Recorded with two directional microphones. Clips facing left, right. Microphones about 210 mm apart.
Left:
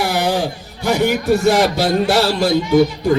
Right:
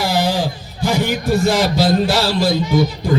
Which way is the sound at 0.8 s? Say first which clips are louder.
Left 2 dB; 65° left (ahead or behind).